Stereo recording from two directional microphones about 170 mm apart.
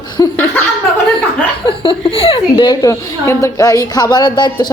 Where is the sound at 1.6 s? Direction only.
30° left (ahead or behind).